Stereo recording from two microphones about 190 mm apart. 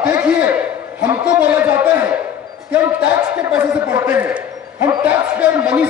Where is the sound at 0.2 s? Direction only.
10° right (ahead or behind).